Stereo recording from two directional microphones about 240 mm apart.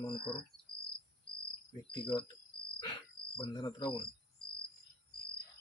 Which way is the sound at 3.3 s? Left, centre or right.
Centre.